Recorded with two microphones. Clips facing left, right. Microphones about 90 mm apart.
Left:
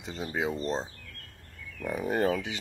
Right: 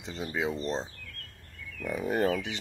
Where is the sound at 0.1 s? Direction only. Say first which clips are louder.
Even; 40° left (ahead or behind).